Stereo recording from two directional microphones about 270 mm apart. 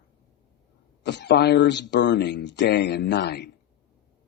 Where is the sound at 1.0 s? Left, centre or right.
Left.